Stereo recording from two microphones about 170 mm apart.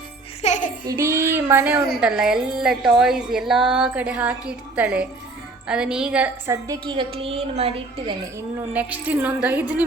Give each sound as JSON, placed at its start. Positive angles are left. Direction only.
{"t": 0.4, "sound": "music", "side_deg": 45}
{"t": 0.9, "sound": "a woman's voice", "side_deg": -15}
{"t": 6.7, "sound": "a woman's voice", "side_deg": -25}
{"t": 8.4, "sound": "a woman's voice", "side_deg": -10}